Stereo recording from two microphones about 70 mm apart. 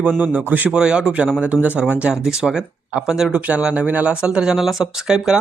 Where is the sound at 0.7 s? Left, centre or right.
Centre.